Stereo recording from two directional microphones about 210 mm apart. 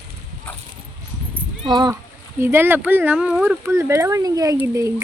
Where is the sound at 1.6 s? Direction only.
20° right (ahead or behind).